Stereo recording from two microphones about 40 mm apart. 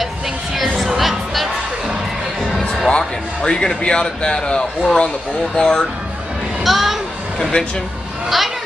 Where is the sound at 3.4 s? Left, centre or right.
Left.